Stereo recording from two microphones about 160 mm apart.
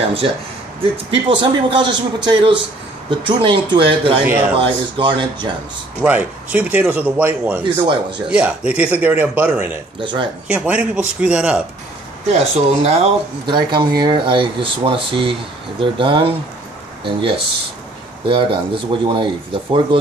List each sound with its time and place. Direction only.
1.1 s speech: 35° right (ahead or behind)
4.2 s speech: 10° right (ahead or behind)
4.6 s speech: 30° right (ahead or behind)
6.0 s speech: 10° right (ahead or behind)
9.9 s speech: 30° right (ahead or behind)
10.5 s speech: 5° right (ahead or behind)
12.3 s speech: 40° right (ahead or behind)
18.2 s speech: 30° right (ahead or behind)